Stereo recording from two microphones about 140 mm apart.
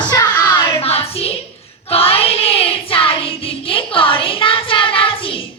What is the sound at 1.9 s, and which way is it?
Child singing, 45° left (ahead or behind).